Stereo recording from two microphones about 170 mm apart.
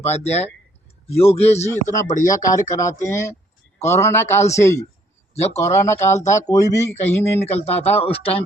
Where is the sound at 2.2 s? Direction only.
20° left (ahead or behind).